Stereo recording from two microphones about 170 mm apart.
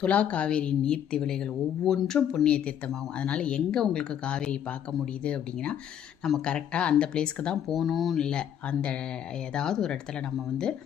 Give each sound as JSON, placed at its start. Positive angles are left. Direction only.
{"t": 0.0, "sound": "speech", "side_deg": 10}